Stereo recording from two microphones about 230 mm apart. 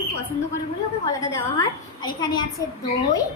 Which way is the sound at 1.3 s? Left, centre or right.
Centre.